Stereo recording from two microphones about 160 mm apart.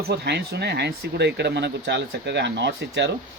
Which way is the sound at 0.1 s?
90° right.